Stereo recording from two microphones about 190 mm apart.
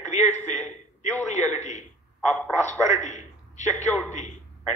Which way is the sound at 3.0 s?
40° left (ahead or behind).